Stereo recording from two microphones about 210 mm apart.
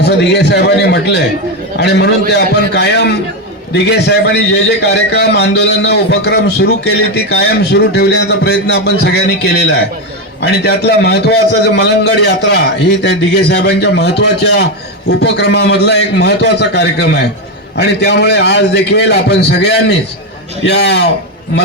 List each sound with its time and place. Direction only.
0.0 s a man's voice: 55° left (ahead or behind)